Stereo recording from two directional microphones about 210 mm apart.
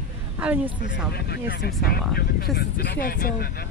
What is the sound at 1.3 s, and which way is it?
Speech, 50° left (ahead or behind).